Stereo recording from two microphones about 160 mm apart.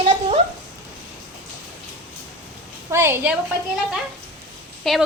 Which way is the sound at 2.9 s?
15° right (ahead or behind).